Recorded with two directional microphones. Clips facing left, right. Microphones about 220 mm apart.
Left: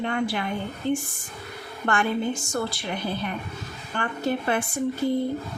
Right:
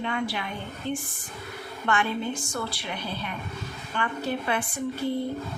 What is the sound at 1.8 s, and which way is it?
Speech, 45° left (ahead or behind).